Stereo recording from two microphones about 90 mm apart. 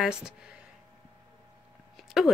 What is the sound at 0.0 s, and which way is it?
Speech, 10° right (ahead or behind).